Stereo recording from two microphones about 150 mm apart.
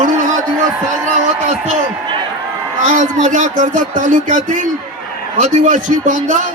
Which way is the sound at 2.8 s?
55° right (ahead or behind).